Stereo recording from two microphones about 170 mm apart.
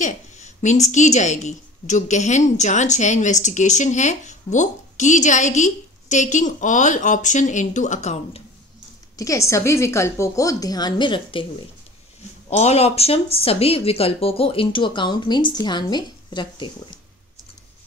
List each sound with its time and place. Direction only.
0.0 s a woman's voice: 45° left (ahead or behind)
9.1 s a woman's voice: 20° left (ahead or behind)
12.4 s speech: 40° left (ahead or behind)